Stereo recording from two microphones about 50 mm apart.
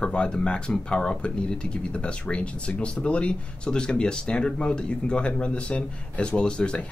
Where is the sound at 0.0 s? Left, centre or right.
Centre.